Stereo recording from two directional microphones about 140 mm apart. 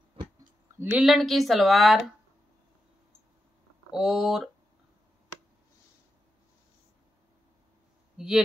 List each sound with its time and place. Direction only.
0.2 s a sound: 40° right (ahead or behind)
0.9 s speech: centre (ahead or behind)
3.9 s speech: 5° right (ahead or behind)
8.2 s speech: 5° right (ahead or behind)